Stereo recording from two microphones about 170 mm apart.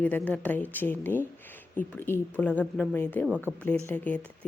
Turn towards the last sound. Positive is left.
turn(degrees=10)  # may be behind; listen again after turning